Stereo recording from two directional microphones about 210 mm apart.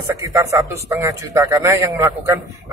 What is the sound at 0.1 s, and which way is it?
Speech, 15° right (ahead or behind).